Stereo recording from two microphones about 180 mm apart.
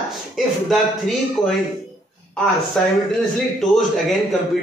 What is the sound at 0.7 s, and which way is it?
Speech, centre (ahead or behind).